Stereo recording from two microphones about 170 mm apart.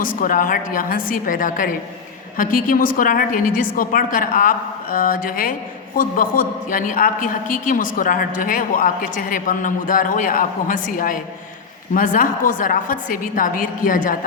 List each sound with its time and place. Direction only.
0.0 s a man's voice: 55° left (ahead or behind)